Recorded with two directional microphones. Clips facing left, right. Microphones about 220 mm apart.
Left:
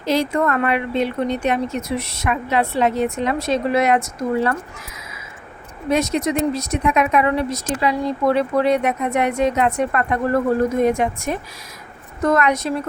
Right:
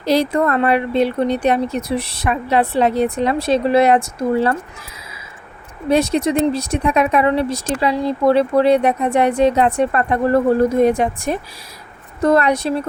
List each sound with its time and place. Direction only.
0.0 s speech: 35° right (ahead or behind)
5.9 s speech: 30° right (ahead or behind)